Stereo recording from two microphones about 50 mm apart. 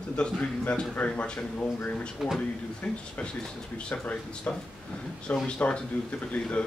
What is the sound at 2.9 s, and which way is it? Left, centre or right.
Speech, centre.